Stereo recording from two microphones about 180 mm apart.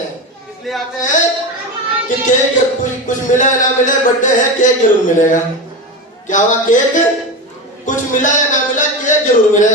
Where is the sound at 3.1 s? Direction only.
45° left (ahead or behind).